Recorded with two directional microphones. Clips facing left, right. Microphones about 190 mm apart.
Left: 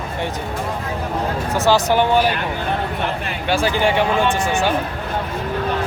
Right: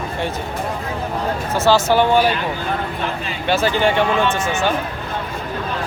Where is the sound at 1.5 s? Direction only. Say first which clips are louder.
Right 1 dB; 15° left (ahead or behind).